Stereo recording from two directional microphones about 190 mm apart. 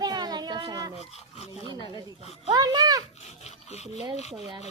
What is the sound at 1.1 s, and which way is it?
Speech, 35° left (ahead or behind).